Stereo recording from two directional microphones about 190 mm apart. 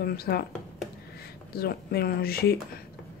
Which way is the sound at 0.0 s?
55° left (ahead or behind).